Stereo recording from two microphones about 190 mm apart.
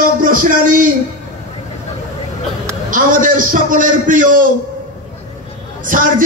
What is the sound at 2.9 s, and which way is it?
A man's voice, 45° right (ahead or behind).